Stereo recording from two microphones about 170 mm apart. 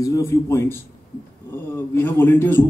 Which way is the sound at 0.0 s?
20° left (ahead or behind).